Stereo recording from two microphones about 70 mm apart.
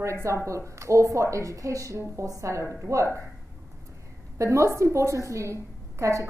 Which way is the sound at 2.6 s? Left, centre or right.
Right.